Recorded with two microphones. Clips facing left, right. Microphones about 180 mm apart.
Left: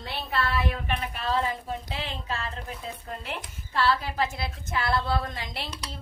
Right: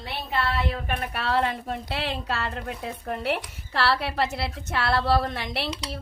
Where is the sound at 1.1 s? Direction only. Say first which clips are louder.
Right 4 dB; 70° right (ahead or behind).